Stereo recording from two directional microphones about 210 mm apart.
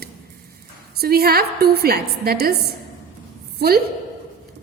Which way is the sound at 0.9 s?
45° right (ahead or behind).